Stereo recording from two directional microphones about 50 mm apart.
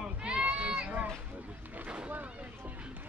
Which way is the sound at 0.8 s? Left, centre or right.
Right.